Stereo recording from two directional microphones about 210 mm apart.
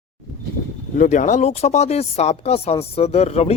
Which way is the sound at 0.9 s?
35° left (ahead or behind).